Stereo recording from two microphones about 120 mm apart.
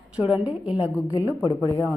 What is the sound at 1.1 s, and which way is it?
Speech, 30° left (ahead or behind).